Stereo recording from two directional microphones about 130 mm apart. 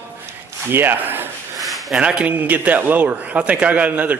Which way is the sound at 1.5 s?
Centre (ahead or behind).